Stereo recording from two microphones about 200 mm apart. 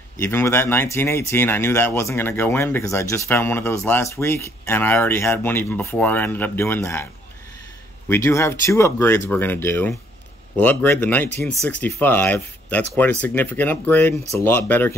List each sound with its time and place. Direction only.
0.2 s speech: 10° left (ahead or behind)
8.1 s speech: 15° left (ahead or behind)
14.1 s speech: 35° right (ahead or behind)
14.4 s speech: 10° left (ahead or behind)